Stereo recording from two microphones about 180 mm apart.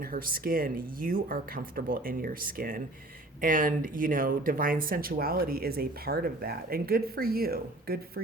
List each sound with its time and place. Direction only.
0.0 s speech: 55° right (ahead or behind)